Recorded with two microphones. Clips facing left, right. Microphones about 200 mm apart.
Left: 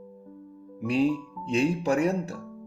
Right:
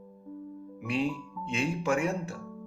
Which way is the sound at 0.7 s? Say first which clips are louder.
Left 7 dB; 40° left (ahead or behind).